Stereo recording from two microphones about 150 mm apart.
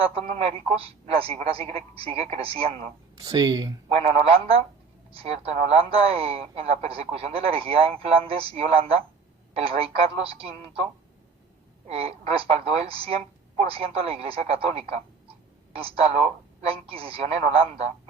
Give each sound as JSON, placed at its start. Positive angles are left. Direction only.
{"t": 0.0, "sound": "a man's voice", "side_deg": -40}
{"t": 3.2, "sound": "speech", "side_deg": -25}
{"t": 3.9, "sound": "a man's voice", "side_deg": -40}
{"t": 11.9, "sound": "a man's voice", "side_deg": -40}